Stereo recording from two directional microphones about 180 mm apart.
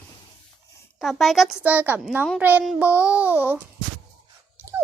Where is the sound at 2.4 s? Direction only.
10° right (ahead or behind).